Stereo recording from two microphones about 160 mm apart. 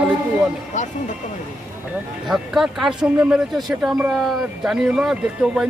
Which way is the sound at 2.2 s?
Centre (ahead or behind).